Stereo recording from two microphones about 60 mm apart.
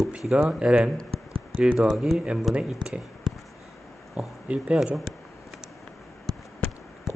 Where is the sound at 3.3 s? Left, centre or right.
Centre.